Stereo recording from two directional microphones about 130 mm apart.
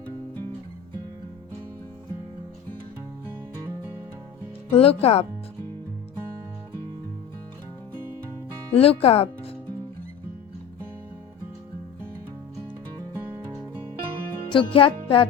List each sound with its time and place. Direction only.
4.7 s speech: 50° left (ahead or behind)
8.7 s speech: 50° left (ahead or behind)
14.5 s music: 40° left (ahead or behind)